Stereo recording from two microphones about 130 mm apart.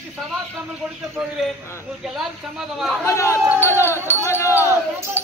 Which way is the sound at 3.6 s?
20° left (ahead or behind).